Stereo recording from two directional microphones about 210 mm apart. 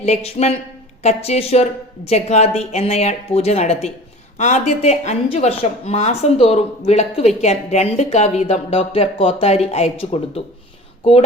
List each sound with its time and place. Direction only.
0.0 s a woman's voice: 30° left (ahead or behind)